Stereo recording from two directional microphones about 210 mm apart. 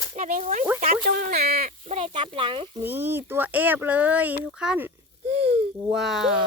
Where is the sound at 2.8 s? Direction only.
10° right (ahead or behind).